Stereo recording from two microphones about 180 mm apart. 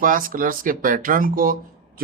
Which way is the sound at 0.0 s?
50° right (ahead or behind).